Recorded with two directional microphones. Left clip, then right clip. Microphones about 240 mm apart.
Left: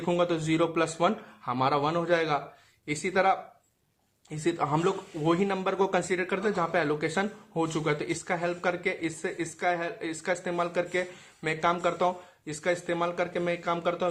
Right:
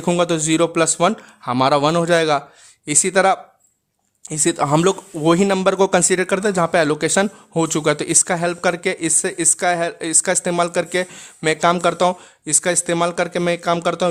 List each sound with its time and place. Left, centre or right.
0.0 s speech: right